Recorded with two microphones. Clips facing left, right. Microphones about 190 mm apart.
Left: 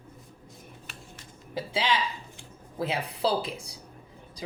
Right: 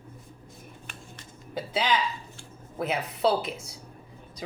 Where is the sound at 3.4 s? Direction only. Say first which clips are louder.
Right 1 dB; 30° left (ahead or behind).